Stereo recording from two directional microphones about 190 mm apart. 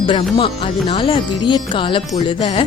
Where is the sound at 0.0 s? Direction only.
25° left (ahead or behind).